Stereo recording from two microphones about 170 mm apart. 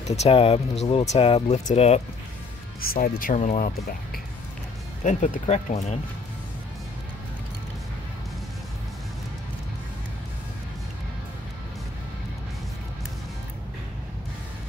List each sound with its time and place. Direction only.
0.1 s speech: 35° left (ahead or behind)
2.8 s speech: 60° left (ahead or behind)
3.3 s speech: 45° left (ahead or behind)